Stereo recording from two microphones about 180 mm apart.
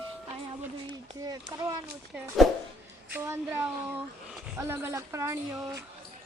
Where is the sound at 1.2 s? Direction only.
20° right (ahead or behind).